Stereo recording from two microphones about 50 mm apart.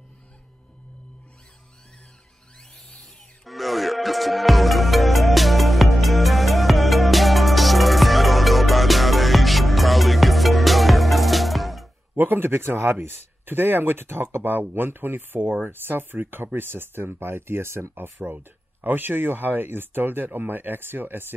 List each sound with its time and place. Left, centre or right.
3.4 s music: centre
12.2 s speech: right
18.3 s speech: right